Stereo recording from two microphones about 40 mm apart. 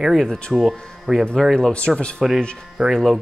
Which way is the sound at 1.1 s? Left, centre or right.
Centre.